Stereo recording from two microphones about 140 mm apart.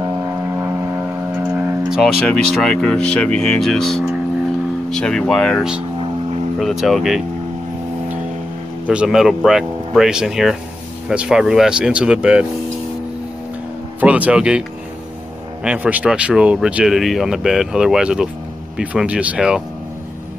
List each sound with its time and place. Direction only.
0.0 s vehicle: 20° right (ahead or behind)
2.2 s speech: 5° left (ahead or behind)
8.8 s speech: 5° right (ahead or behind)
13.9 s speech: 10° right (ahead or behind)
15.6 s speech: 10° right (ahead or behind)